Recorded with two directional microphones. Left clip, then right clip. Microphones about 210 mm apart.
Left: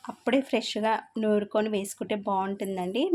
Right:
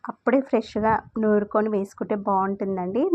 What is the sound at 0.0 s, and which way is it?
Speech, 15° right (ahead or behind).